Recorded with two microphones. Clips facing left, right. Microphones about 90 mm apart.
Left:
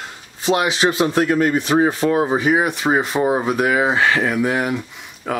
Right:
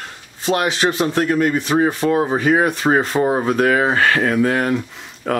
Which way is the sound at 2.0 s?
10° left (ahead or behind).